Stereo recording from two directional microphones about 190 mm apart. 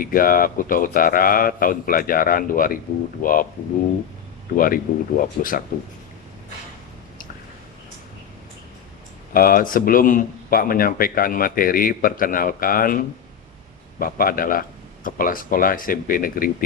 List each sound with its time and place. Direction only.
0.0 s speech: 50° left (ahead or behind)
4.5 s speech: 45° left (ahead or behind)
9.3 s speech: 50° left (ahead or behind)
14.0 s speech: 50° left (ahead or behind)